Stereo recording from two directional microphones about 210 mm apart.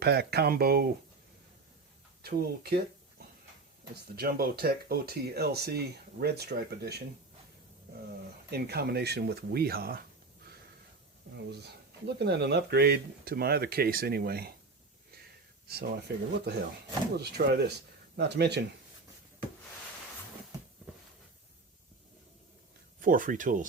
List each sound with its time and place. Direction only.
0.0 s speech: 50° right (ahead or behind)
2.2 s speech: 45° right (ahead or behind)
8.4 s speech: 50° right (ahead or behind)
11.5 s speech: 50° right (ahead or behind)
15.6 s speech: 50° right (ahead or behind)
23.0 s speech: 40° right (ahead or behind)